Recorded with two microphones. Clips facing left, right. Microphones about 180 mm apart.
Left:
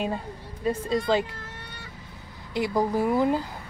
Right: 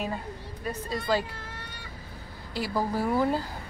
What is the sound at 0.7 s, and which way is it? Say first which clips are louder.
Speech: left 5 dB; 25° left (ahead or behind).